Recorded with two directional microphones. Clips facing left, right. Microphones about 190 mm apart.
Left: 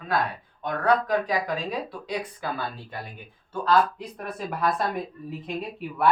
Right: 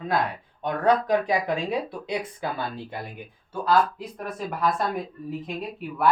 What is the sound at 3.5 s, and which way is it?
Speech, 10° right (ahead or behind).